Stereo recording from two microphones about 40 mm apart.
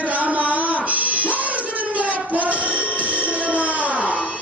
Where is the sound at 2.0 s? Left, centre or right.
Right.